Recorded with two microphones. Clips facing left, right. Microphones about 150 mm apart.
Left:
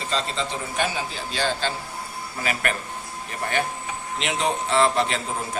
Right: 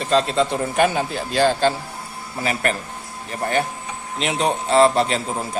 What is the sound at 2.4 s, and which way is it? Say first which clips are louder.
Speech: right 4 dB; 30° right (ahead or behind).